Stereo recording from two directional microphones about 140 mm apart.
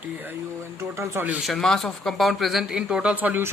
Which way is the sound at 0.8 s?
20° right (ahead or behind).